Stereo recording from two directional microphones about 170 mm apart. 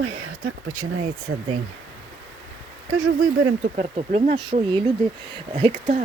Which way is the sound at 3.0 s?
50° right (ahead or behind).